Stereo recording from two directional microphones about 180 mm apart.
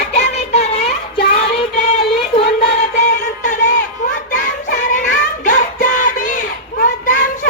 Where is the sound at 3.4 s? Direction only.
45° left (ahead or behind).